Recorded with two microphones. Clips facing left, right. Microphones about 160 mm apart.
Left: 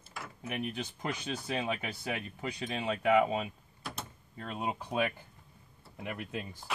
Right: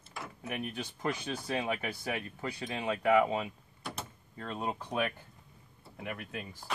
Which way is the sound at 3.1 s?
15° left (ahead or behind).